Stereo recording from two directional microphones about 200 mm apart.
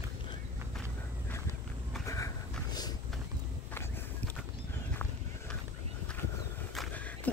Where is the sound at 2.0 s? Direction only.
15° left (ahead or behind).